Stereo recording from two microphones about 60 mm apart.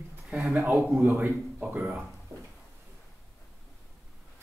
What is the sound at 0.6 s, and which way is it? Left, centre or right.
Speech, right.